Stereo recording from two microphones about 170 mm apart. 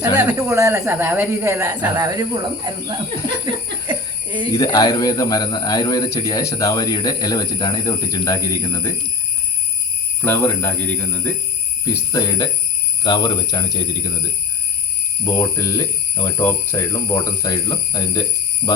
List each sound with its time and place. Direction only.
0.0 s speech: 10° right (ahead or behind); by 2.9 s 25° right (ahead or behind)
4.5 s a man's voice: 20° left (ahead or behind)
10.2 s speech: 10° left (ahead or behind)
12.1 s a man's voice: 25° left (ahead or behind)